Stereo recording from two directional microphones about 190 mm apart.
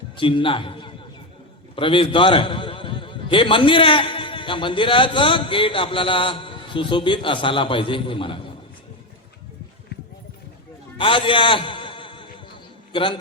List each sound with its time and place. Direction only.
0.2 s a man's voice: 25° left (ahead or behind)
10.9 s a sound: 25° left (ahead or behind)
12.9 s a man's voice: 25° left (ahead or behind)